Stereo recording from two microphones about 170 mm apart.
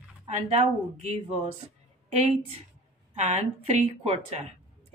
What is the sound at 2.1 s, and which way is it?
Speech, 40° right (ahead or behind).